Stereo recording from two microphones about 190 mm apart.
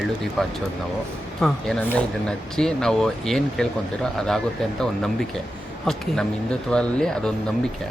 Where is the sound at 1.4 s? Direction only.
Centre (ahead or behind).